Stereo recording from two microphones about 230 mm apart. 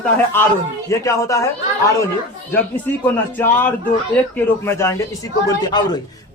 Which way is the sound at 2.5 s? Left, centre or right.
Centre.